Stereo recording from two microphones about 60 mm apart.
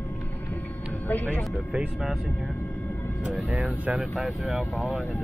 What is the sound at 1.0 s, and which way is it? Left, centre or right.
Speech, left.